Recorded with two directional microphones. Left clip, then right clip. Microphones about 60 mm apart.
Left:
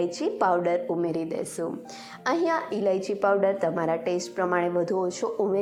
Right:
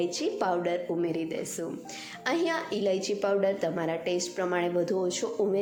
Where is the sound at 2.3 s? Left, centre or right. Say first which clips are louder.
Left 3 dB; right.